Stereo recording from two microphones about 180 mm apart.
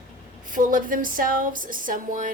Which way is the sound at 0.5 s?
50° right (ahead or behind).